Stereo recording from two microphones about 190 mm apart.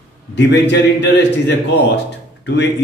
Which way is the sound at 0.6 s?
65° left (ahead or behind).